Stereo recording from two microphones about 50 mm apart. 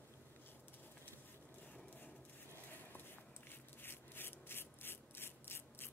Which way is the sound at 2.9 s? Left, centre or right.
Left.